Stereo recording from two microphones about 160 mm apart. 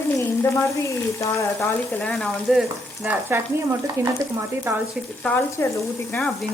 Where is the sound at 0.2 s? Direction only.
20° left (ahead or behind); by 4.8 s 20° right (ahead or behind).